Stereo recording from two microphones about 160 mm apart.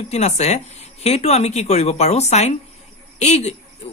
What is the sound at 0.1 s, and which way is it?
Speech, 40° left (ahead or behind).